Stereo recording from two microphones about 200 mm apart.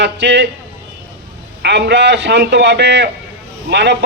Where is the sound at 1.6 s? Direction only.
55° right (ahead or behind).